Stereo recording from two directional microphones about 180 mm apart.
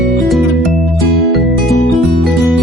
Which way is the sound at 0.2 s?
Centre (ahead or behind).